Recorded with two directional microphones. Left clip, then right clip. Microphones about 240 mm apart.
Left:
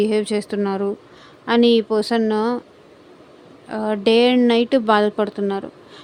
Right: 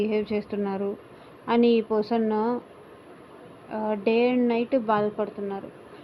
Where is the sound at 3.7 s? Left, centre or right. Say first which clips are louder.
Left 7 dB; left.